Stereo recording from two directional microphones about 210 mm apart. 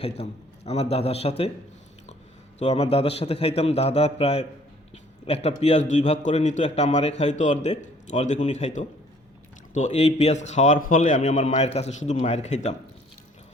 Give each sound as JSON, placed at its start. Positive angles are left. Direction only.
{"t": 0.0, "sound": "a man's voice", "side_deg": 30}
{"t": 2.6, "sound": "a man's voice", "side_deg": 30}